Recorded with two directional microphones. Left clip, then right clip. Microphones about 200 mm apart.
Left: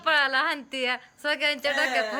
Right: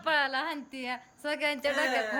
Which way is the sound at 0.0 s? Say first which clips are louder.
Left 6 dB; 10° right (ahead or behind).